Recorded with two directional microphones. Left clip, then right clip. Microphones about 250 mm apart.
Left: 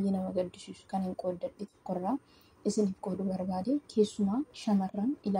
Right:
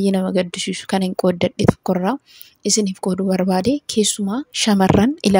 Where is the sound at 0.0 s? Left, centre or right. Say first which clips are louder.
Right 14 dB; right.